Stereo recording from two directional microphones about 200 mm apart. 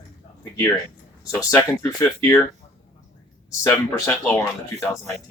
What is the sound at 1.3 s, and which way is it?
Speech, 15° left (ahead or behind).